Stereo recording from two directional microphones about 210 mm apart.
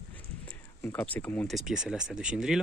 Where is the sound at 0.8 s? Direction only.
10° left (ahead or behind).